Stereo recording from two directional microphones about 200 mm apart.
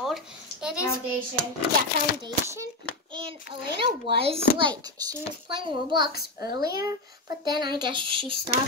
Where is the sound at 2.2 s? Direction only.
15° right (ahead or behind).